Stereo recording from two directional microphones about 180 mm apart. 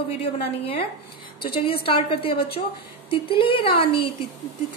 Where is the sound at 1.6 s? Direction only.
30° left (ahead or behind).